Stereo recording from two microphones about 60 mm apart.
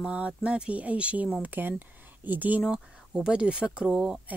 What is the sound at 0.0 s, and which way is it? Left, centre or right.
Speech, centre.